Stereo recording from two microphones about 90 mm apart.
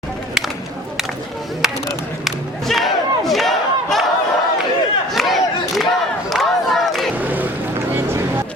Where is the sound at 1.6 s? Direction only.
5° right (ahead or behind).